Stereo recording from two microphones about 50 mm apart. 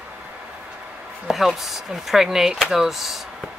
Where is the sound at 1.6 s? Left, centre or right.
Centre.